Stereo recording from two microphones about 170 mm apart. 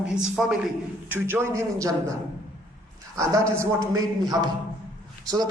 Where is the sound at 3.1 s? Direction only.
20° right (ahead or behind).